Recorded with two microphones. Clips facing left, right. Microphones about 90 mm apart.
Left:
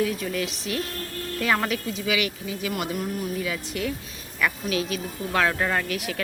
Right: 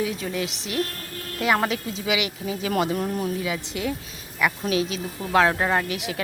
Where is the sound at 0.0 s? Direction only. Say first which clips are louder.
Left 1 dB; 25° right (ahead or behind).